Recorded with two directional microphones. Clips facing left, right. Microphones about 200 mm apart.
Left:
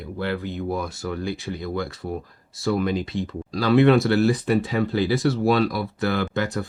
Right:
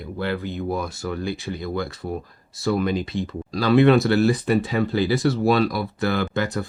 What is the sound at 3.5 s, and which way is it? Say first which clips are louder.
Speech: right 1 dB; centre (ahead or behind).